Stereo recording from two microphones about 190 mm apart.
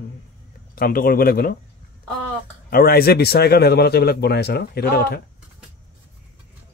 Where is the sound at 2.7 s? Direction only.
50° left (ahead or behind).